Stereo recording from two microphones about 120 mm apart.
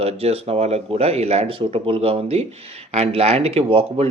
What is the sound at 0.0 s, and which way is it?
Speech, 60° right (ahead or behind).